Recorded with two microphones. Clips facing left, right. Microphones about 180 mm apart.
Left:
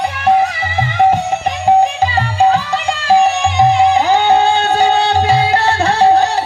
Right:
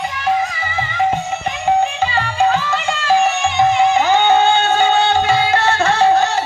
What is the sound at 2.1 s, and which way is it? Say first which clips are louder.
Music: left 3 dB; 35° left (ahead or behind).